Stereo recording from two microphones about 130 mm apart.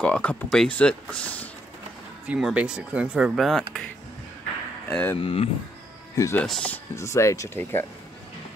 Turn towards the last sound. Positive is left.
turn(degrees=15)  # may be behind; listen again after turning